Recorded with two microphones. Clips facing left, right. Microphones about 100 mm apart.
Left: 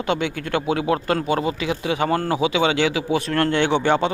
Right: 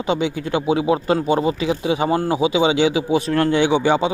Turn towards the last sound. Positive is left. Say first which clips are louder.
# right 2 dB
turn(degrees=-10)  # may be behind; listen again after turning